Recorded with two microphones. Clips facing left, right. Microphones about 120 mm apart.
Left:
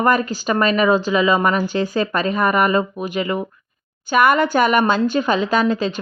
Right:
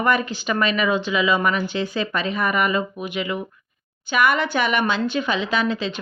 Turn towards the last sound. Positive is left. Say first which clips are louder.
# left 5 dB
turn(degrees=45)  # may be behind; listen again after turning